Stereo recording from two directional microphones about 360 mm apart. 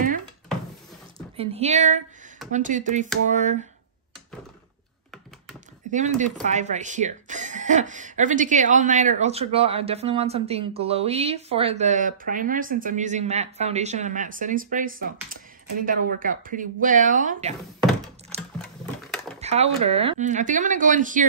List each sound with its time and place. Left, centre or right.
1.1 s speech: centre
5.9 s speech: centre
19.0 s a sound: centre
19.4 s speech: centre